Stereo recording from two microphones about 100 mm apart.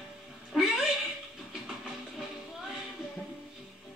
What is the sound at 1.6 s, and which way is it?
Train, 5° right (ahead or behind).